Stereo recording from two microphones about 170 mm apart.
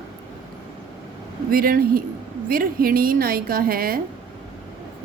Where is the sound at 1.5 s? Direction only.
60° right (ahead or behind).